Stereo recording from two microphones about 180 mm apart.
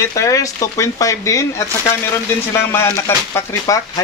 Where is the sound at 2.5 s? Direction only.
15° left (ahead or behind).